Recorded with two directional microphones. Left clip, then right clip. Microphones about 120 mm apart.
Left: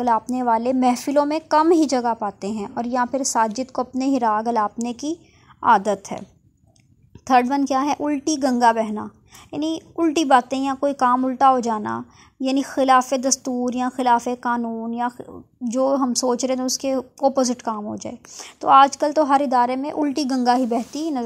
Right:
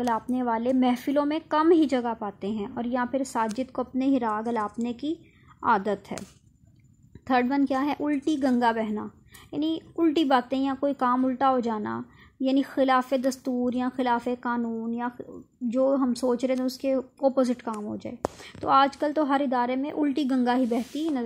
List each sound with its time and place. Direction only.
0.0 s a woman's voice: 25° left (ahead or behind)
7.2 s a woman's voice: 30° left (ahead or behind)
17.3 s a woman's voice: 25° left (ahead or behind)